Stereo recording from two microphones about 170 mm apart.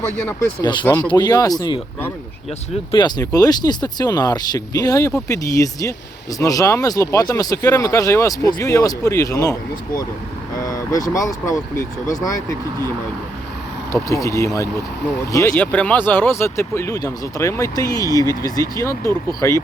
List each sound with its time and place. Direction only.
0.3 s speech: 20° left (ahead or behind)
0.9 s speech: 10° left (ahead or behind)
2.9 s speech: 25° left (ahead or behind)
10.6 s speech: 20° left (ahead or behind)
13.9 s speech: 20° left (ahead or behind)